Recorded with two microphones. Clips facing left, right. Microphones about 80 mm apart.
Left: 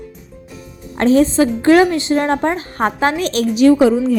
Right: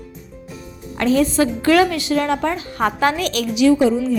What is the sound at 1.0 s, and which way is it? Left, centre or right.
Speech, left.